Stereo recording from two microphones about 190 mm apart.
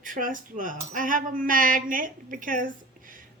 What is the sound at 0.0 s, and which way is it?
A woman's voice, 45° right (ahead or behind).